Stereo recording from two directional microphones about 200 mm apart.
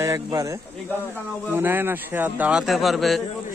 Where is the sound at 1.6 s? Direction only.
10° right (ahead or behind).